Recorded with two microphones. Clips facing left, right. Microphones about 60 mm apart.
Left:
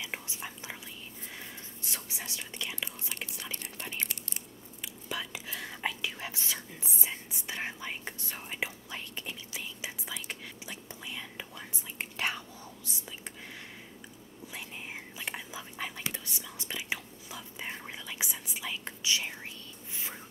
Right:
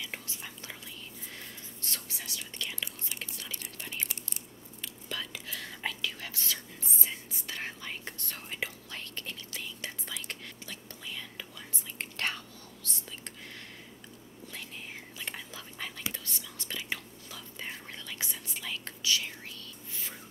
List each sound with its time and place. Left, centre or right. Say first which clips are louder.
0.0 s whispering: left 2 dB; centre
1.8 s whispering: left 1 dB; centre
15.1 s whispering: left 2 dB; centre